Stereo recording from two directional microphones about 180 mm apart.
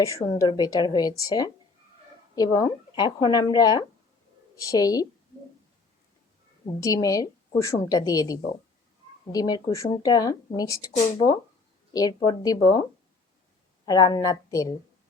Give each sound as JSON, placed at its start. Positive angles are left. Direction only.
{"t": 0.3, "sound": "speech", "side_deg": 25}
{"t": 6.8, "sound": "speech", "side_deg": 20}
{"t": 13.8, "sound": "speech", "side_deg": 20}